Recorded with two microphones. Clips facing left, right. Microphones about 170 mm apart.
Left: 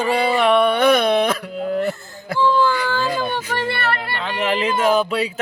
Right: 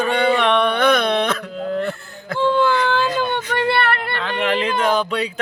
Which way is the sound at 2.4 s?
65° right (ahead or behind).